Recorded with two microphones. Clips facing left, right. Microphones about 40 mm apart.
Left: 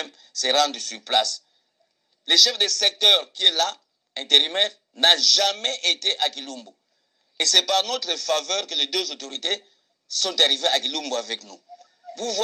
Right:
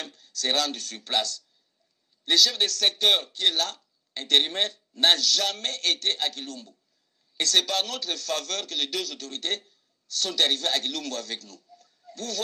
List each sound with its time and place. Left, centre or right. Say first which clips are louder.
0.0 s a man's voice: left 4 dB; left